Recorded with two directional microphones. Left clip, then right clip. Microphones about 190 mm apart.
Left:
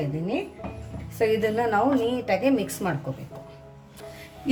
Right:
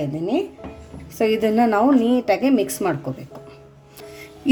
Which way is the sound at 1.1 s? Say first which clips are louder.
Right 4 dB; 45° right (ahead or behind).